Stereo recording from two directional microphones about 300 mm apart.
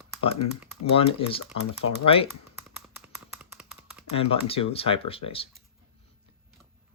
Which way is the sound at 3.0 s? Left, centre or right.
Centre.